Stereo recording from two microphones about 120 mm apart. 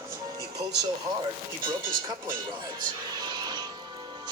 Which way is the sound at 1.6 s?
35° right (ahead or behind).